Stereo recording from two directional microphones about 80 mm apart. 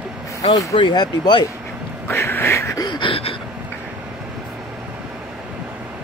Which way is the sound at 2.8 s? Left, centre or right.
Left.